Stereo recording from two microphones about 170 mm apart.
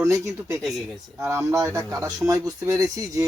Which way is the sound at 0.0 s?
15° right (ahead or behind).